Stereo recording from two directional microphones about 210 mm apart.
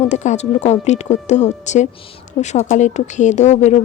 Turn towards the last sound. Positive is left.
turn(degrees=35)  # may be behind; listen again after turning